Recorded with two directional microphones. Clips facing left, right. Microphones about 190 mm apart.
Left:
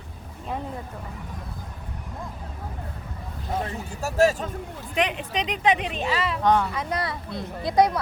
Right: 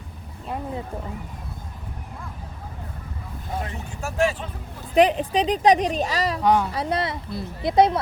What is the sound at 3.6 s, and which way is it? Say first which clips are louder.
Speech: left 2 dB; 40° left (ahead or behind).